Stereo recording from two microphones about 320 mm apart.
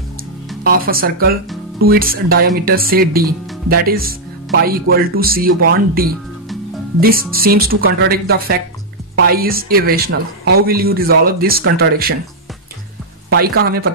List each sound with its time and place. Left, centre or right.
0.7 s speech: right
7.0 s speech: right
13.3 s speech: right